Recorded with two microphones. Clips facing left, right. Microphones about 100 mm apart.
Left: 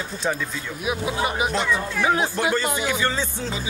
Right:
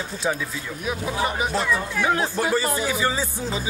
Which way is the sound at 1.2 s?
15° left (ahead or behind).